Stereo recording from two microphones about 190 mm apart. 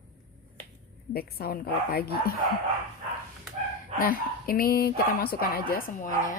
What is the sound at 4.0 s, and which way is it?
A woman's voice, 50° left (ahead or behind).